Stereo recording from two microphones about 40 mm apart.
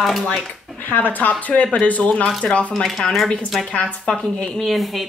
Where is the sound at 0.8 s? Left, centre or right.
Left.